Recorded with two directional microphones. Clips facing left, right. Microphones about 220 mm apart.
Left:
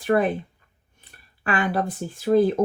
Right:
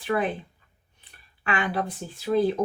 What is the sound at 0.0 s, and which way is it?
Speech, 45° left (ahead or behind).